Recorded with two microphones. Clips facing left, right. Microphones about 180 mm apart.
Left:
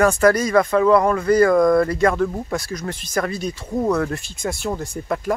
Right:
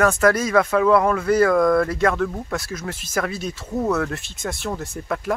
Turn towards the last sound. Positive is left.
turn(degrees=0)  # may be behind; listen again after turning